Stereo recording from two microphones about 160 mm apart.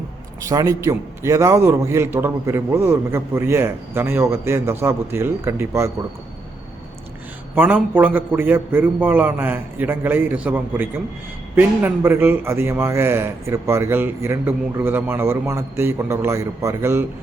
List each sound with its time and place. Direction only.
0.4 s a man's voice: 20° right (ahead or behind)
7.5 s a man's voice: 10° right (ahead or behind)